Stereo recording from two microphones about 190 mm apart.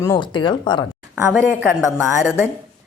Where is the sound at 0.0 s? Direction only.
20° left (ahead or behind).